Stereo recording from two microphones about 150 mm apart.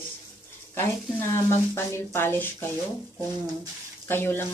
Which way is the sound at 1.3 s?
15° left (ahead or behind).